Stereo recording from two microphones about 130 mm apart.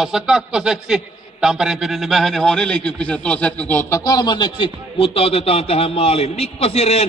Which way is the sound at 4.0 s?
30° left (ahead or behind).